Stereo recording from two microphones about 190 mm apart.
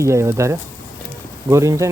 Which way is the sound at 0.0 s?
15° right (ahead or behind).